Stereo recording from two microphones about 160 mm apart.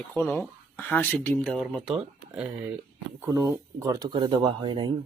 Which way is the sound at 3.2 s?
15° right (ahead or behind).